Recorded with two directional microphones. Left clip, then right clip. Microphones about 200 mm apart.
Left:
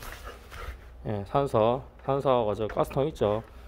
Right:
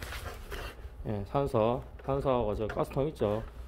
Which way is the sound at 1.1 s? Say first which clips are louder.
Left 4 dB; 25° left (ahead or behind).